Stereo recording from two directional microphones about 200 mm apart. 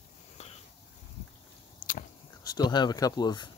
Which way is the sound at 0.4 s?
35° left (ahead or behind).